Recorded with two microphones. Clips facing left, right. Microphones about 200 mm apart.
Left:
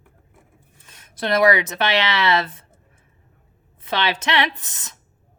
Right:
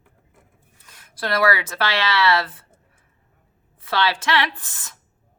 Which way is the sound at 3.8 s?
20° left (ahead or behind).